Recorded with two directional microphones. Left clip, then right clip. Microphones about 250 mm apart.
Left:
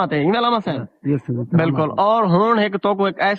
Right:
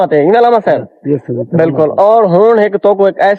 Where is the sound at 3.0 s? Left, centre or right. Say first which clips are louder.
Right 10 dB; centre.